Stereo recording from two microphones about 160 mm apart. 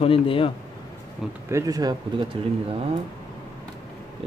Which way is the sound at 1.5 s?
20° right (ahead or behind).